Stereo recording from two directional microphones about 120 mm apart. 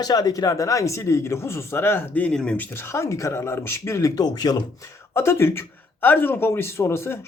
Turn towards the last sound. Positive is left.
turn(degrees=20)  # may be behind; listen again after turning